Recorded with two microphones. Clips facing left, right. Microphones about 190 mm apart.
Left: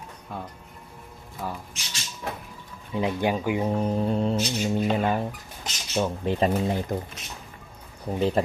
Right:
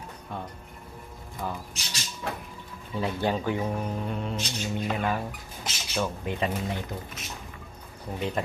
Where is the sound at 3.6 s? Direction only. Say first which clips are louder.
Left 6 dB; 30° left (ahead or behind).